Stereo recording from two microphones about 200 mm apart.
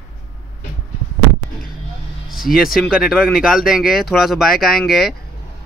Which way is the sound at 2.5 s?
45° left (ahead or behind).